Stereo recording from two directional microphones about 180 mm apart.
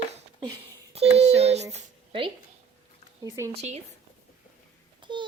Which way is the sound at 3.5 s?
40° right (ahead or behind).